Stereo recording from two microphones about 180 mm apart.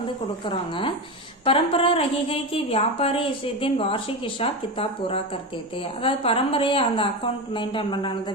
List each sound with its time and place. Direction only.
0.4 s a woman's voice: 30° left (ahead or behind)